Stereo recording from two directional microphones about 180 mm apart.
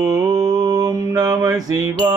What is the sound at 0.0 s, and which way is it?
Mantra, 20° right (ahead or behind).